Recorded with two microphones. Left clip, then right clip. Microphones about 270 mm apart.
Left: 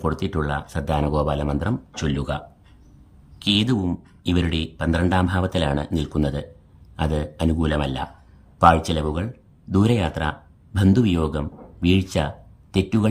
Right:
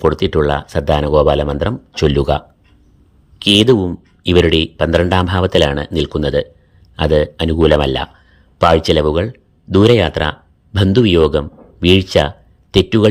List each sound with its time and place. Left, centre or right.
0.0 s speech: centre
3.4 s speech: centre